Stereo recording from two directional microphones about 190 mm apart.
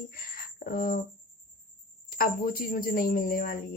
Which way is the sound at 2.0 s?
50° left (ahead or behind).